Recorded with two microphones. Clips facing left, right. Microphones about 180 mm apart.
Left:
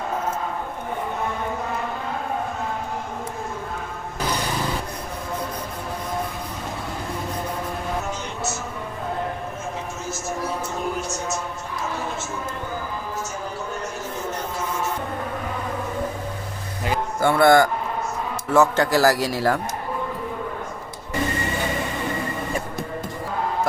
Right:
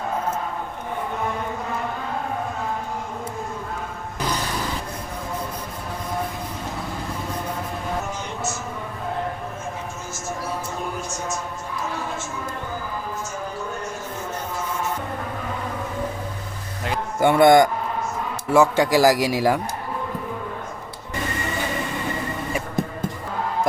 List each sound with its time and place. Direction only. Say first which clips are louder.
17.2 s a man's voice: right 2 dB; 15° right (ahead or behind)